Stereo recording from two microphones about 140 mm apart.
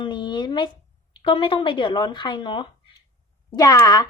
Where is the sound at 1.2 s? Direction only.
40° left (ahead or behind).